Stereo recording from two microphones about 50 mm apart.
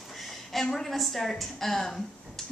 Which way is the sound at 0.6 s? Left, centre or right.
Centre.